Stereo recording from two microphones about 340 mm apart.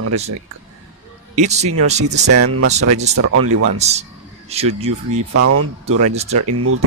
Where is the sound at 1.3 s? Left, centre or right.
Centre.